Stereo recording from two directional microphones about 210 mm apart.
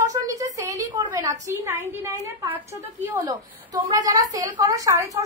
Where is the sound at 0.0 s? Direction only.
15° right (ahead or behind).